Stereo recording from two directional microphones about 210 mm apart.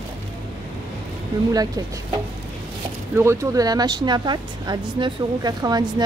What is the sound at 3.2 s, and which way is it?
Speech, 15° right (ahead or behind).